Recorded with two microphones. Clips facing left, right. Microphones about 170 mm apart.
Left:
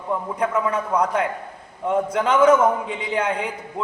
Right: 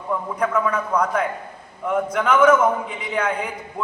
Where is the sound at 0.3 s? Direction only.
20° left (ahead or behind).